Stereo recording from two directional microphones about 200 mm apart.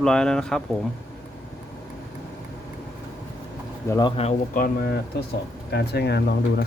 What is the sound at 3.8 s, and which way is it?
Speech, 20° left (ahead or behind).